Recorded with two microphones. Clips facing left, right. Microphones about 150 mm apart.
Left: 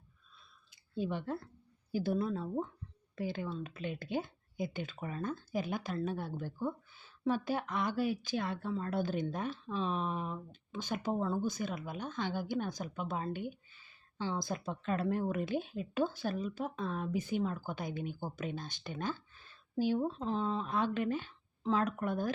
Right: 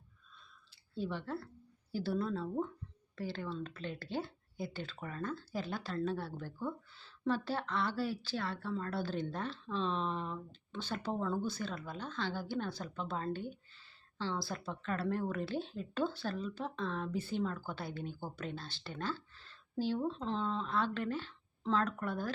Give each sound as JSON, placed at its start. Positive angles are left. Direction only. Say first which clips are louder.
{"t": 0.9, "sound": "speech", "louder": "left 2 dB", "side_deg": 15}